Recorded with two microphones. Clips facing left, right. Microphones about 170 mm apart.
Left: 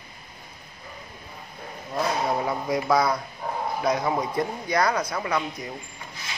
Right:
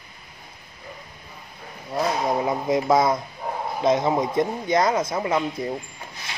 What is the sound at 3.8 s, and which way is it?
Speech, 25° right (ahead or behind).